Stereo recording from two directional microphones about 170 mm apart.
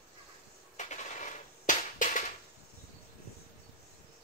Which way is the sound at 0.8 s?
45° left (ahead or behind).